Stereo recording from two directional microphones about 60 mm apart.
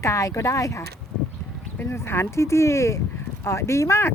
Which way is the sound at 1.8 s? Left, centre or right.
Left.